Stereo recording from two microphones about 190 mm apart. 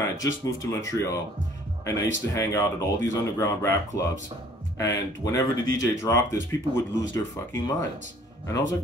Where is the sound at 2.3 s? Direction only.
15° left (ahead or behind).